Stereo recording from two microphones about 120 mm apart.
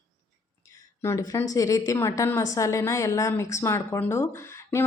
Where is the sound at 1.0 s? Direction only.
25° left (ahead or behind).